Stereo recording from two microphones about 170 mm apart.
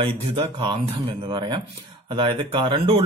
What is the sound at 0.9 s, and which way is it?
Speech, 25° right (ahead or behind).